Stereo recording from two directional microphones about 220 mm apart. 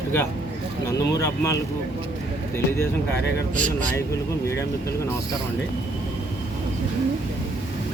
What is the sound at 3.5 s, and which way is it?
Speech, 35° right (ahead or behind).